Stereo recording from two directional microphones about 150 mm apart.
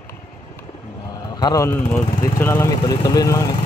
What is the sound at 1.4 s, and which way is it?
Speech, 25° left (ahead or behind).